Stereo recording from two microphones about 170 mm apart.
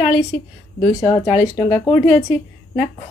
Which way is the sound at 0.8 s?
20° left (ahead or behind).